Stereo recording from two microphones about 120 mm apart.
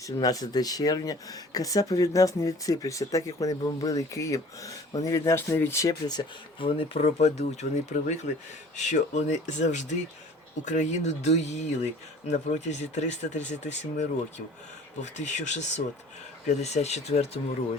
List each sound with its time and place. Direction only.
0.0 s speech: 30° left (ahead or behind); by 17.4 s 60° left (ahead or behind)